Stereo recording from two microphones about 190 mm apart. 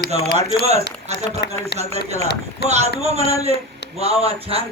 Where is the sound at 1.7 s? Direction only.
60° left (ahead or behind).